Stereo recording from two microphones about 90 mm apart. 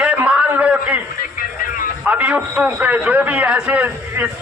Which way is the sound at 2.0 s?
15° right (ahead or behind).